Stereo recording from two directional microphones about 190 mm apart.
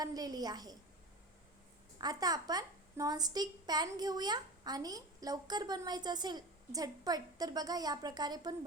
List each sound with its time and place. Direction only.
0.0 s a woman's voice: 20° right (ahead or behind)
2.0 s a woman's voice: 20° right (ahead or behind)